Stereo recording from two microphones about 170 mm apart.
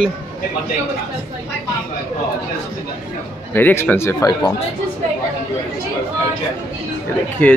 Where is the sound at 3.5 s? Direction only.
10° left (ahead or behind).